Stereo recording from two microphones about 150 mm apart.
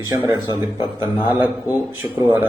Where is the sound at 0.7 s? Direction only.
30° left (ahead or behind).